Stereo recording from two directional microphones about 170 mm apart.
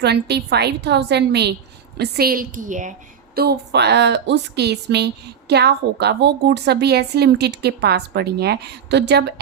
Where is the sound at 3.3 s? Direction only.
75° right (ahead or behind).